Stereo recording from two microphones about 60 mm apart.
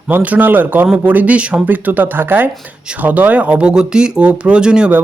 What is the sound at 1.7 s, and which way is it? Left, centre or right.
Speech, right.